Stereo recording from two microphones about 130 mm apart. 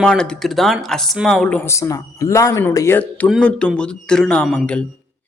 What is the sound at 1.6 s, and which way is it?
Speech, 20° left (ahead or behind).